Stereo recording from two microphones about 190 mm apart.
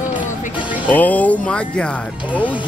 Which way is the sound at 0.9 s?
10° left (ahead or behind).